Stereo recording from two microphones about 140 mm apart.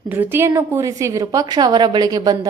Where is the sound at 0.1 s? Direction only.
15° right (ahead or behind).